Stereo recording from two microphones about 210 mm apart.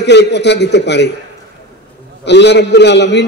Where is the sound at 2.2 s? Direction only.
55° left (ahead or behind).